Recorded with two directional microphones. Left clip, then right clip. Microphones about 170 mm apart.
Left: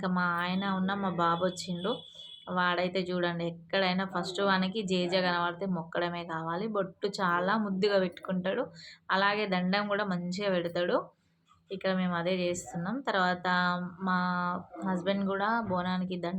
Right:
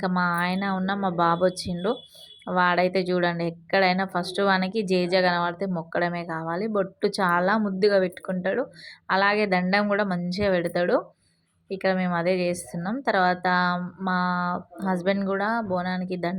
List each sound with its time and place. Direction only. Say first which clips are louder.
0.0 s a woman's voice: right 6 dB; 40° right (ahead or behind)